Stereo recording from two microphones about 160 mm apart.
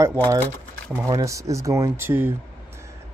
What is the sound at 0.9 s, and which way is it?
Speech, 20° right (ahead or behind).